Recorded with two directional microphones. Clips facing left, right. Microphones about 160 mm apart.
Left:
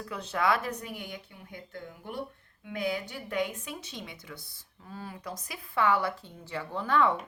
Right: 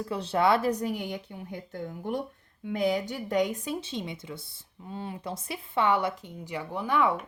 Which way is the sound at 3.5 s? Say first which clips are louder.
Right 8 dB; 35° right (ahead or behind).